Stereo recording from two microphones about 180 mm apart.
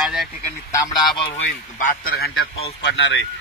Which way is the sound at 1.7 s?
50° left (ahead or behind).